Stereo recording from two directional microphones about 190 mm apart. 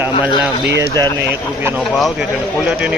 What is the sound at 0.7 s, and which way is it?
Speech, 60° right (ahead or behind).